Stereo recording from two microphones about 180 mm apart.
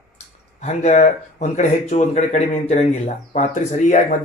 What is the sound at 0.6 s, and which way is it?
Speech, 40° left (ahead or behind).